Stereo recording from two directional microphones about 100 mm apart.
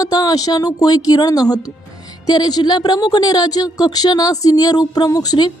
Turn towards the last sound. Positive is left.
turn(degrees=40)  # may be behind; listen again after turning